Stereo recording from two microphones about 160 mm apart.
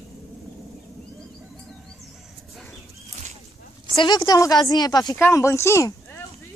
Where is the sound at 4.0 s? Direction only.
25° left (ahead or behind).